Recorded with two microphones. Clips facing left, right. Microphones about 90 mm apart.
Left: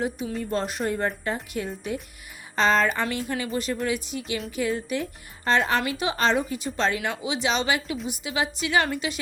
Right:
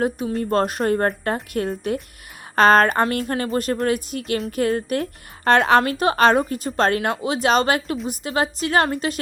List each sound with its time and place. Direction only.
0.0 s a woman's voice: 45° right (ahead or behind)
5.5 s a woman's voice: 65° right (ahead or behind)
6.4 s a woman's voice: 45° right (ahead or behind)